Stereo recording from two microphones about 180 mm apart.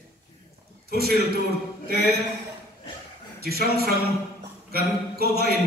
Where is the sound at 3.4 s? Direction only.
60° right (ahead or behind).